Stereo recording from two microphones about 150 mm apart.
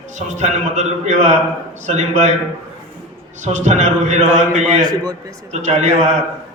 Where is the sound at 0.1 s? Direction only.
50° right (ahead or behind).